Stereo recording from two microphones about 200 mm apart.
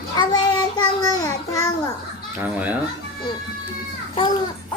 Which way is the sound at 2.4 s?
10° right (ahead or behind).